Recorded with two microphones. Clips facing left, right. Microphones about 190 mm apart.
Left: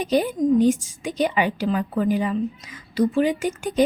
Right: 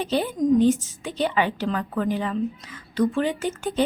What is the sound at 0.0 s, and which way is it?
A woman's voice, 15° left (ahead or behind).